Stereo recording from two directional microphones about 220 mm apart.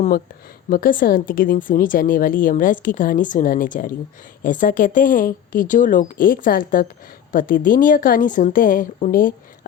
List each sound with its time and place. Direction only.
0.7 s a woman's voice: 40° left (ahead or behind)